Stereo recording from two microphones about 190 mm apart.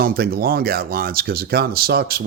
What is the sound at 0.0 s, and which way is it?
Speech, 50° right (ahead or behind).